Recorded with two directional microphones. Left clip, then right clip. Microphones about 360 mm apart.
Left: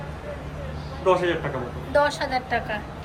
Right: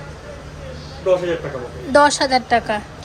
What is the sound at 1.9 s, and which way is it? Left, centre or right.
Speech, centre.